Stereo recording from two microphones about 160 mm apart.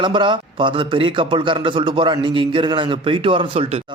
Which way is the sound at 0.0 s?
30° right (ahead or behind).